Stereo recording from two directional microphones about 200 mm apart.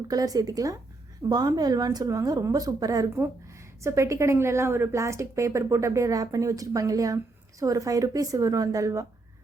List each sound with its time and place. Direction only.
0.1 s a woman's voice: 20° right (ahead or behind)